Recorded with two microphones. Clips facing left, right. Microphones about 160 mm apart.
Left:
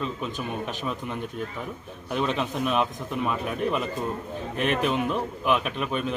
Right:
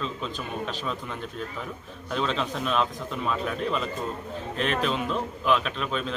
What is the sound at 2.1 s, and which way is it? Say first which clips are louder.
A man's voice: left 2 dB; 15° left (ahead or behind).